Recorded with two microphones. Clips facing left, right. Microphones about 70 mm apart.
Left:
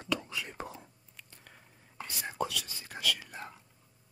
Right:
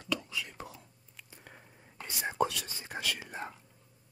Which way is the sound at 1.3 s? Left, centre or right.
Centre.